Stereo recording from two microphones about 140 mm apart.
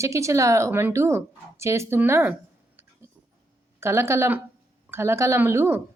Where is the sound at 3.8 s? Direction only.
20° right (ahead or behind).